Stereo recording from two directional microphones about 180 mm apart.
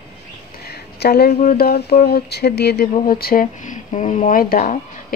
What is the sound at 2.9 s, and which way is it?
Speech, 55° left (ahead or behind).